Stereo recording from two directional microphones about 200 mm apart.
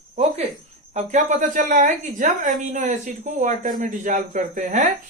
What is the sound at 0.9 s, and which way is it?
A woman's voice, 35° right (ahead or behind).